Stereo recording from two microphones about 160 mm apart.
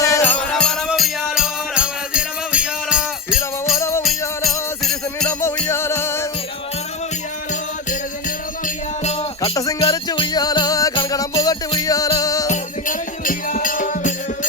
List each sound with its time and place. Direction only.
0.0 s music: 15° left (ahead or behind); by 3.8 s 5° right (ahead or behind)
3.8 s music: 15° left (ahead or behind)
4.4 s jingle bell: centre (ahead or behind)
5.4 s music: 15° left (ahead or behind)
8.6 s music: 45° left (ahead or behind)
9.4 s jingle bell: 20° left (ahead or behind)
9.8 s music: 30° left (ahead or behind)
12.5 s music: 55° left (ahead or behind)